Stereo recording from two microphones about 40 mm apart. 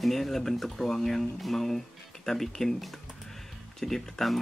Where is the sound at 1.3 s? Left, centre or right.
Centre.